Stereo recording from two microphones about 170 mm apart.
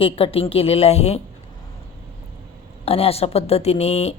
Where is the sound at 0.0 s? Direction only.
35° left (ahead or behind).